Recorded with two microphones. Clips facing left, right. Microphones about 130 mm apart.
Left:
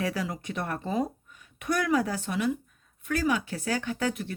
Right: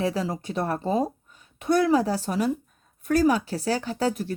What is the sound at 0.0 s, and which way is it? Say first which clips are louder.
Speech: right 4 dB; 30° right (ahead or behind).